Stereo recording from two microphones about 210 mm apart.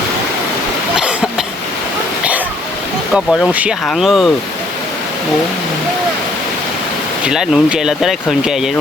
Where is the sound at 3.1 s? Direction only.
5° right (ahead or behind).